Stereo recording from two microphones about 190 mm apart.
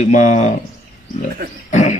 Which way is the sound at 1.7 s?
40° left (ahead or behind).